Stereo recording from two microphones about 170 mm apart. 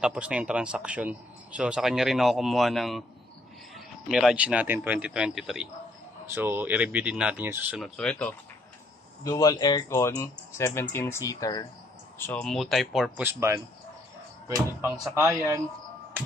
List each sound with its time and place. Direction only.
0.0 s speech: 5° right (ahead or behind)
6.3 s speech: 10° right (ahead or behind)
8.0 s speech: 5° left (ahead or behind)
9.2 s speech: 20° left (ahead or behind)
12.2 s speech: 10° left (ahead or behind); by 15.6 s 15° right (ahead or behind)